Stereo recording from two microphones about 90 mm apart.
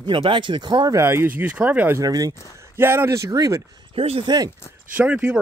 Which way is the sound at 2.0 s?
45° right (ahead or behind).